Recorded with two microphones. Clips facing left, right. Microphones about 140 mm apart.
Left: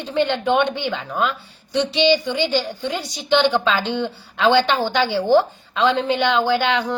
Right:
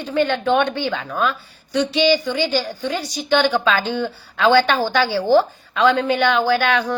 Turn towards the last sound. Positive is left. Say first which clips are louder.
# right 1 dB
turn(degrees=20)  # may be behind; listen again after turning